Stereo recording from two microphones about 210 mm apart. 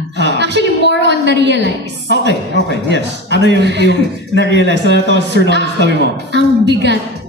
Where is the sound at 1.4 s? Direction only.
55° right (ahead or behind).